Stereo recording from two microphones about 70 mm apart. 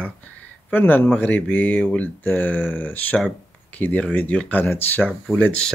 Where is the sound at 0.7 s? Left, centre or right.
Left.